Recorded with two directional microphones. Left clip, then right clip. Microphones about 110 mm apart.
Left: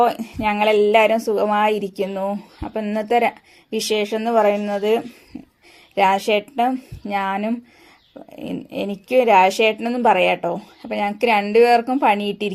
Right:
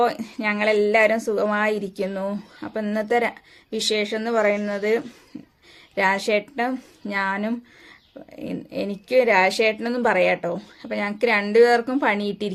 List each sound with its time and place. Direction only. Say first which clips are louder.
0.0 s speech: left 4 dB; 30° left (ahead or behind)
2.0 s speech: left 3 dB; 15° left (ahead or behind)
5.3 s a sound: left 3 dB; 5° left (ahead or behind)
5.9 s speech: left 4 dB; 30° left (ahead or behind)
12.2 s a woman's voice: left 3 dB; 55° right (ahead or behind)